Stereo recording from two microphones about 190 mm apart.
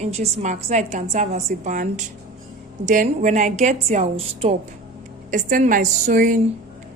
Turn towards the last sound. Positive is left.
turn(degrees=-45)  # may be behind; listen again after turning